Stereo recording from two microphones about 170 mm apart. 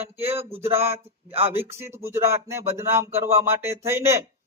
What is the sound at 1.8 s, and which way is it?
Speech, 15° right (ahead or behind).